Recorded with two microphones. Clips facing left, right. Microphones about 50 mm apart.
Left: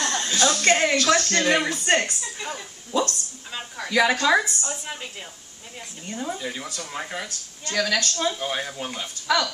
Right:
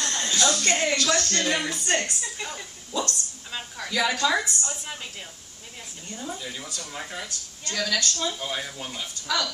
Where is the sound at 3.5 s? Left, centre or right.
Centre.